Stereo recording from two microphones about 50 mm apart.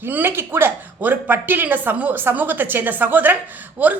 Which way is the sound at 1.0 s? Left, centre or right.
Right.